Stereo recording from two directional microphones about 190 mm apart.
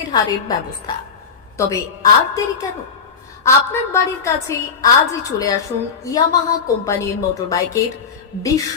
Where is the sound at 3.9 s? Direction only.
15° left (ahead or behind).